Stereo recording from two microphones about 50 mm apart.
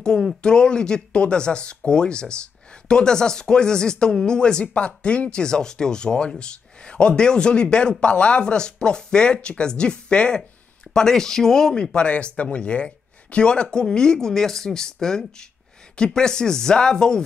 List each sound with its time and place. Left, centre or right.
0.4 s speech: centre
10.9 s speech: centre